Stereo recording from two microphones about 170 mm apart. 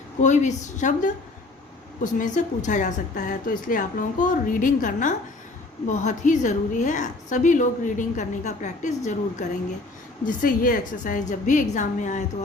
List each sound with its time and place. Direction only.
0.2 s a woman's voice: 45° left (ahead or behind)
10.2 s a woman's voice: 55° left (ahead or behind)